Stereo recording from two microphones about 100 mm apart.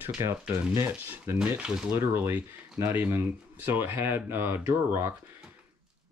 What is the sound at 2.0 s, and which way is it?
Speech, 20° right (ahead or behind).